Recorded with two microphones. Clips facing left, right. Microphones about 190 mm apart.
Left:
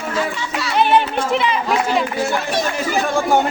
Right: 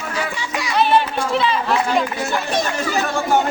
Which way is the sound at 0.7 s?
20° left (ahead or behind).